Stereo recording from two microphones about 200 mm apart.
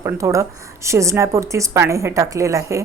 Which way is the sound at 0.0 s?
15° right (ahead or behind).